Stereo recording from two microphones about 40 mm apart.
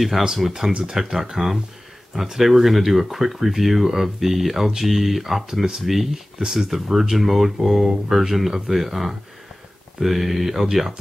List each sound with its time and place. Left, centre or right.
0.2 s speech: centre
0.5 s speech: centre
6.4 s speech: centre
6.7 s speech: centre